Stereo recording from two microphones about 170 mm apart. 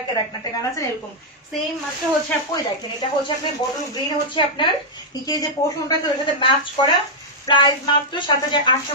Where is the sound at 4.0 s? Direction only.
30° left (ahead or behind).